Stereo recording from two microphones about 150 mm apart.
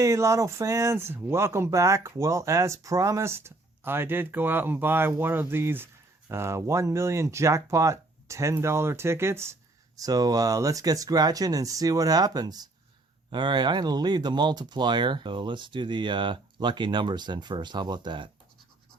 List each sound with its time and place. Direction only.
0.0 s speech: 20° right (ahead or behind)